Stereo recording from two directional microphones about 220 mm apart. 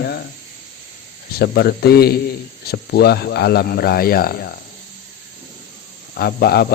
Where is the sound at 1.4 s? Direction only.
45° left (ahead or behind).